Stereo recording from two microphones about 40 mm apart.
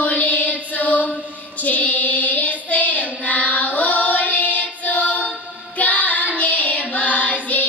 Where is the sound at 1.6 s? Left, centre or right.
Left.